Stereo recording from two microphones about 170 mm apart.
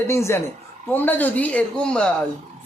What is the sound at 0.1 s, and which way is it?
Speech, 15° left (ahead or behind).